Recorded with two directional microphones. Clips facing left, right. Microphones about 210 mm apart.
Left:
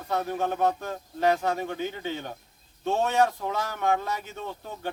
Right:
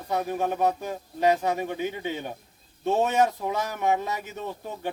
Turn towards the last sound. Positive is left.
turn(degrees=-10)  # may be behind; listen again after turning